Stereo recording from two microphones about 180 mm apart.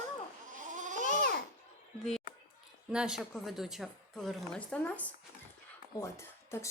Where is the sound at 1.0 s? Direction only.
45° left (ahead or behind).